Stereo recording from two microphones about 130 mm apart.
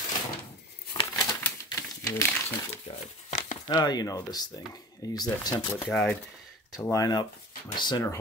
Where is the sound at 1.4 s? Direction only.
20° left (ahead or behind).